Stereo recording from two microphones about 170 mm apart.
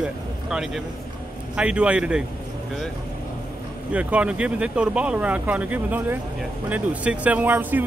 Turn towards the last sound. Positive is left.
turn(degrees=-10)  # may be behind; listen again after turning